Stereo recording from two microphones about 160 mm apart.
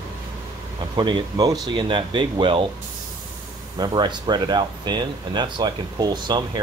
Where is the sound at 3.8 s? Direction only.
30° right (ahead or behind).